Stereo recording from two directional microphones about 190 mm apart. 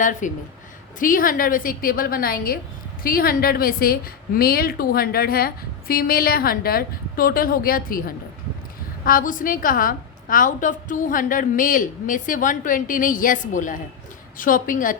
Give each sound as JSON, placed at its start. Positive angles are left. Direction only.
{"t": 0.0, "sound": "a woman's voice", "side_deg": 40}